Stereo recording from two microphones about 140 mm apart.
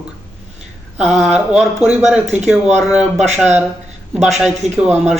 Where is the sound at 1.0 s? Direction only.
Centre (ahead or behind).